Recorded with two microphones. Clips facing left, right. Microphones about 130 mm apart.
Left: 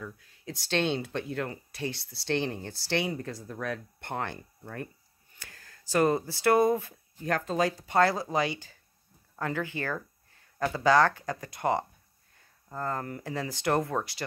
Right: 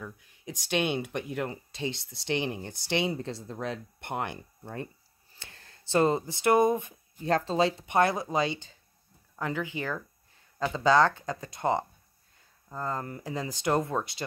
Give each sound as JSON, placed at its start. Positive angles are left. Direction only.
{"t": 0.0, "sound": "speech", "side_deg": -15}
{"t": 5.3, "sound": "a sound", "side_deg": -25}
{"t": 7.3, "sound": "speech", "side_deg": -30}